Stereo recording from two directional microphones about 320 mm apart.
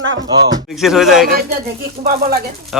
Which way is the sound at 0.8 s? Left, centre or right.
Centre.